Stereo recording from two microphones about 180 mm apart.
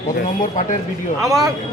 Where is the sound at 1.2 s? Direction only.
20° right (ahead or behind).